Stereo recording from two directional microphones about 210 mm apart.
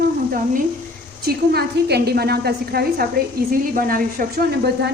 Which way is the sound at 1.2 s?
50° right (ahead or behind).